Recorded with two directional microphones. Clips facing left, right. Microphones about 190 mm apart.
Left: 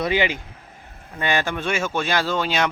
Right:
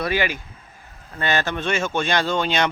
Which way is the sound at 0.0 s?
20° left (ahead or behind).